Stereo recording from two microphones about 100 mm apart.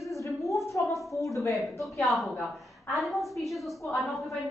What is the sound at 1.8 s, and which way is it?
A woman's voice, centre (ahead or behind).